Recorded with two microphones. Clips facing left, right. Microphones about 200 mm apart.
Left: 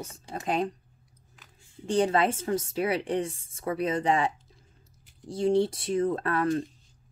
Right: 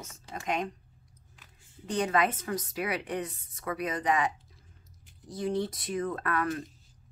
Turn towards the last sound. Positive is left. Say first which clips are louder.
# left 5 dB
turn(degrees=30)  # may be behind; listen again after turning